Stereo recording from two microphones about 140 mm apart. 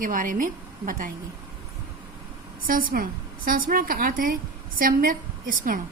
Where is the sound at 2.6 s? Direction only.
90° right.